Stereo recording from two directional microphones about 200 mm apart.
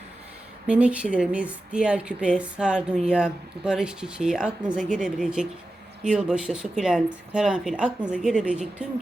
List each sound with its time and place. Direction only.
0.7 s a woman's voice: 5° right (ahead or behind)